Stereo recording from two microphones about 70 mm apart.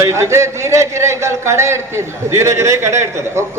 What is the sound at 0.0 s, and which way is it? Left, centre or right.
Speech, right.